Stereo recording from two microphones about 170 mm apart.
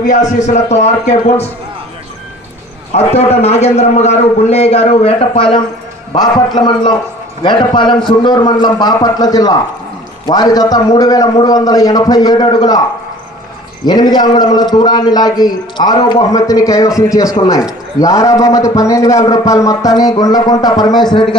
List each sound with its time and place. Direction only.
0.0 s a man's voice: 45° left (ahead or behind)
2.9 s a man's voice: 40° left (ahead or behind)
13.8 s a man's voice: 25° left (ahead or behind)